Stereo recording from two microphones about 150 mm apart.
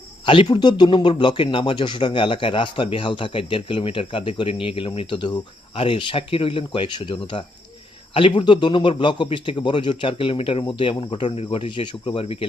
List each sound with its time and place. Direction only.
0.3 s speech: 35° left (ahead or behind)